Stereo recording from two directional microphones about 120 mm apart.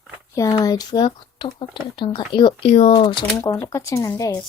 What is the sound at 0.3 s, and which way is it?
Speech, 30° left (ahead or behind).